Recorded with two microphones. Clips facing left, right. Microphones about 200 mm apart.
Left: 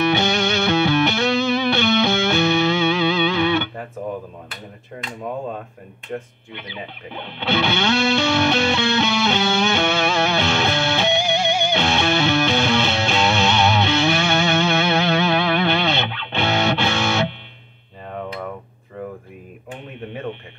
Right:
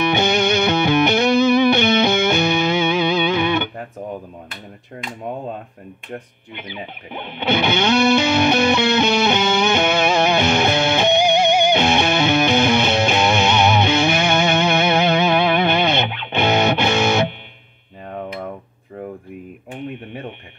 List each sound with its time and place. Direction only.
0.3 s music: 15° right (ahead or behind)
6.1 s music: 15° right (ahead or behind)